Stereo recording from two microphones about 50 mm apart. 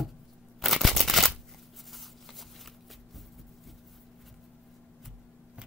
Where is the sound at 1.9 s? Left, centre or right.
Centre.